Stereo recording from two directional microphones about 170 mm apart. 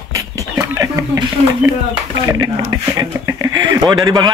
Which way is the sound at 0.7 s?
20° right (ahead or behind).